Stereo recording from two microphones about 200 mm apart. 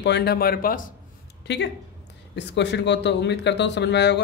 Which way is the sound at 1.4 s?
60° left (ahead or behind).